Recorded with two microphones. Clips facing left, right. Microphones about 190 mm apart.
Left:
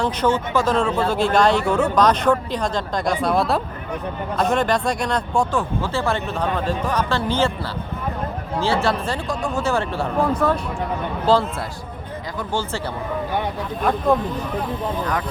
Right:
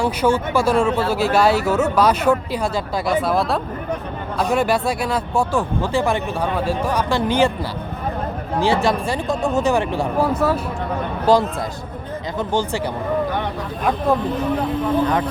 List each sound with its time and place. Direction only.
0.0 s speech: 10° right (ahead or behind)
8.6 s speech: 15° right (ahead or behind)